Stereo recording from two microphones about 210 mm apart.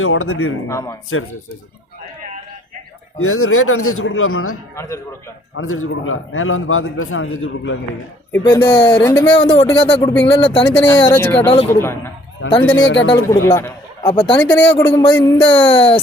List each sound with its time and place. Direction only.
0.0 s speech: 85° left
0.7 s speech: 15° left (ahead or behind)
3.2 s speech: 90° left
5.5 s a man's voice: 75° left (ahead or behind)
8.3 s speech: 15° left (ahead or behind)
9.4 s speech: 25° left (ahead or behind)
10.8 s speech: 10° left (ahead or behind)
12.4 s a man's voice: 75° left (ahead or behind)
12.7 s speech: 60° left (ahead or behind)
13.2 s a man's voice: 15° left (ahead or behind)
14.1 s speech: 25° left (ahead or behind)
14.3 s speech: 10° left (ahead or behind); by 16.0 s 25° left (ahead or behind)